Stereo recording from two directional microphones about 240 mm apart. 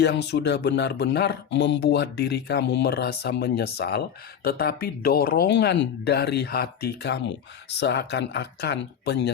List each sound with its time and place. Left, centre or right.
0.0 s speech: left